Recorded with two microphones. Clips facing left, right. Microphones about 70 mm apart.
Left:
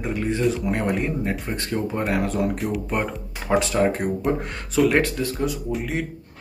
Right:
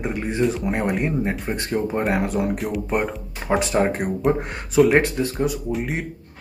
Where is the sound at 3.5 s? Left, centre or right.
Right.